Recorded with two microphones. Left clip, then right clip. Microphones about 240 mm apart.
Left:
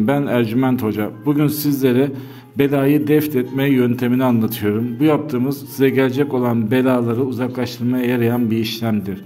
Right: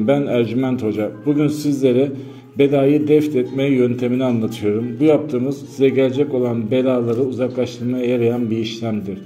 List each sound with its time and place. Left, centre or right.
0.0 s a man's voice: left